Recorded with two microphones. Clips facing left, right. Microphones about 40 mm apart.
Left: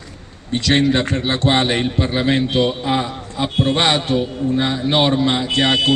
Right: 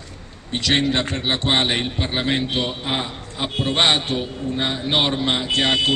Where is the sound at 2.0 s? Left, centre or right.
Right.